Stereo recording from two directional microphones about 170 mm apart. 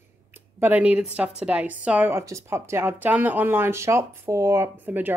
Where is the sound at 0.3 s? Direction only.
10° right (ahead or behind).